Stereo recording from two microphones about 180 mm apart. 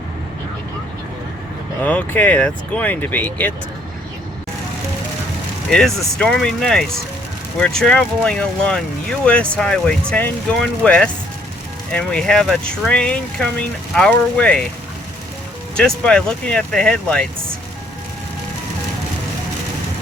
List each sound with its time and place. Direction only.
1.8 s speech: 10° left (ahead or behind)
5.7 s speech: centre (ahead or behind)
15.7 s speech: 5° left (ahead or behind)